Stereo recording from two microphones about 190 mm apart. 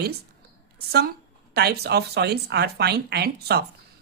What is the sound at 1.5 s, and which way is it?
Speech, 55° right (ahead or behind).